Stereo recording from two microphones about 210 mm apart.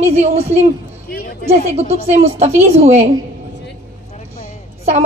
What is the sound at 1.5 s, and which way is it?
Speech, 30° right (ahead or behind).